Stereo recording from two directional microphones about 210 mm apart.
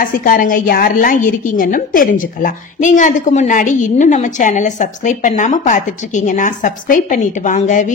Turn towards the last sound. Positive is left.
turn(degrees=35)  # may be behind; listen again after turning